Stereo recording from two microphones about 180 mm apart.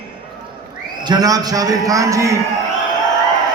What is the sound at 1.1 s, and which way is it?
A man's voice, 20° right (ahead or behind).